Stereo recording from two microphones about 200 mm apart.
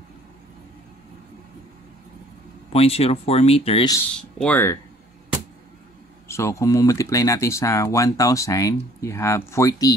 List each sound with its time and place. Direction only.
2.7 s speech: 30° left (ahead or behind)
4.1 s speech: 5° left (ahead or behind)
6.2 s speech: 15° left (ahead or behind)